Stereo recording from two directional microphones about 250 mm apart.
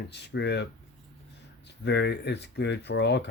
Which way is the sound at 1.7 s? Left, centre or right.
Left.